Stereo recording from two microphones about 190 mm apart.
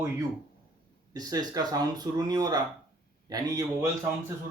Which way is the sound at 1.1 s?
20° right (ahead or behind).